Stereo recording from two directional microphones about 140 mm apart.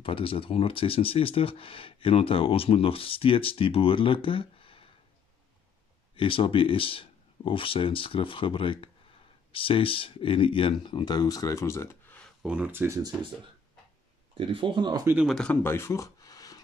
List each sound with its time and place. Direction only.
0.0 s speech: 40° left (ahead or behind)
6.1 s speech: 40° left (ahead or behind); by 12.3 s 15° left (ahead or behind)
12.4 s speech: 10° right (ahead or behind)
14.3 s speech: 40° right (ahead or behind)
15.2 s speech: 5° left (ahead or behind); by 16.6 s 25° left (ahead or behind)